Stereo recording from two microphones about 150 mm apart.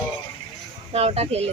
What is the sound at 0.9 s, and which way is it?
Speech, 40° right (ahead or behind).